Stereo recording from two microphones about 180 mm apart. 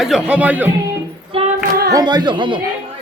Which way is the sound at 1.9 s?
20° right (ahead or behind).